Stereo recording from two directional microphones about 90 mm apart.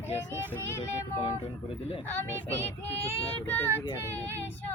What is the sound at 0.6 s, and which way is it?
Child singing, 30° left (ahead or behind).